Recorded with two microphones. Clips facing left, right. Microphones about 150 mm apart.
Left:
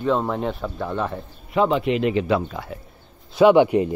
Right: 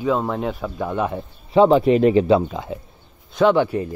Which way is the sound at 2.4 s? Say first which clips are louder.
Right 4 dB; 20° right (ahead or behind).